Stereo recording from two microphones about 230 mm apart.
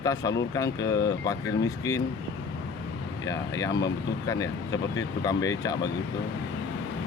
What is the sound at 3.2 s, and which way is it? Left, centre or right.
Speech, centre.